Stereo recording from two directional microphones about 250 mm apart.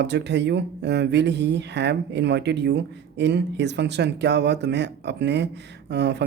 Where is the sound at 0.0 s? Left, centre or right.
Right.